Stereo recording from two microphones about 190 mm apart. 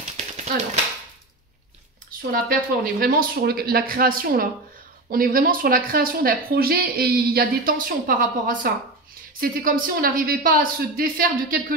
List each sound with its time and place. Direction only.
2.0 s speech: 50° right (ahead or behind)